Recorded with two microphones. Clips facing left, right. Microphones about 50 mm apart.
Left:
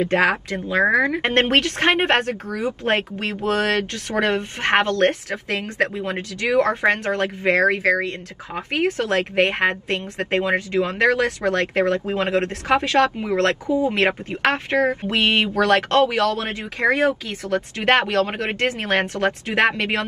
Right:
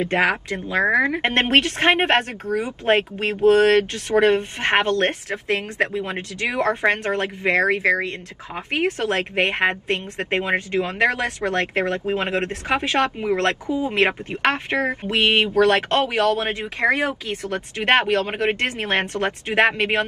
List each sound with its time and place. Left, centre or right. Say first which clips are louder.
0.0 s speech: left 1 dB; right